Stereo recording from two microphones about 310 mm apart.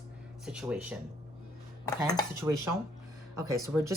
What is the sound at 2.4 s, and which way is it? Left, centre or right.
A woman's voice, centre.